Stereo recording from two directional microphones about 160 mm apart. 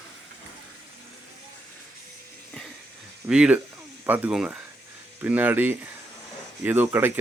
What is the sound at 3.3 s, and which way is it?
Speech, 5° right (ahead or behind).